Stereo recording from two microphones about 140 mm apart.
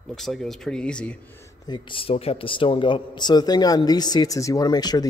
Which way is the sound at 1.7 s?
40° left (ahead or behind).